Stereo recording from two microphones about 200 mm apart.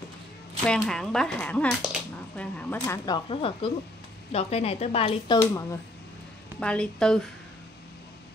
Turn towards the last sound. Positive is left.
turn(degrees=5)  # may be behind; listen again after turning